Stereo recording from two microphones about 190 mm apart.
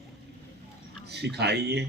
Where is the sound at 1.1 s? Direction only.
60° right (ahead or behind).